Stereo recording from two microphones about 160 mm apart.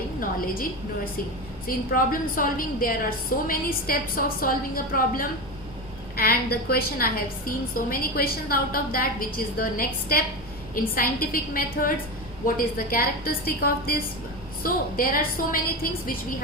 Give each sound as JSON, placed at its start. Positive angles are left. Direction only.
{"t": 0.2, "sound": "a woman's voice", "side_deg": 60}